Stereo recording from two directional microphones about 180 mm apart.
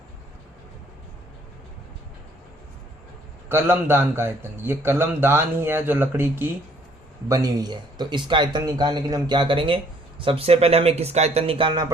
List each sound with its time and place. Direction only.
3.5 s a man's voice: 15° right (ahead or behind)